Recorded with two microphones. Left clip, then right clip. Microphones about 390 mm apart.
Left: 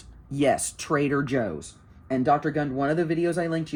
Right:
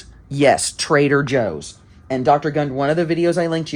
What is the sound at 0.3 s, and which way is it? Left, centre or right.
Speech, centre.